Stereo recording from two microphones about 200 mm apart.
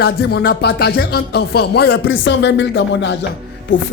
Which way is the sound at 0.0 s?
55° left (ahead or behind).